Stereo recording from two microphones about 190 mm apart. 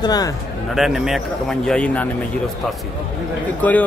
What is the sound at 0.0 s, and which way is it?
Speech, 20° left (ahead or behind).